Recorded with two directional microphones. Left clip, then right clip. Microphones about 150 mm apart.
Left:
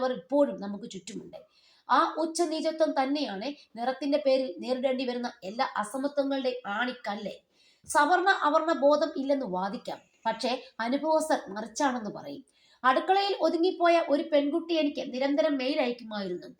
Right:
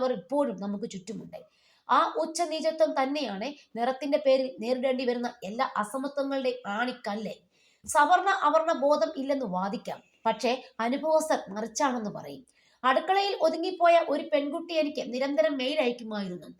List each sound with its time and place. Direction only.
0.0 s a woman's voice: 35° right (ahead or behind)